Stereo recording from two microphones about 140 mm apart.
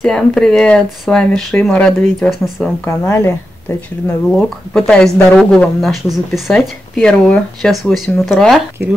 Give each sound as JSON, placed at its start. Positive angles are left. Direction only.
{"t": 0.0, "sound": "speech", "side_deg": 5}
{"t": 2.8, "sound": "a woman's voice", "side_deg": 20}
{"t": 4.3, "sound": "speech", "side_deg": 0}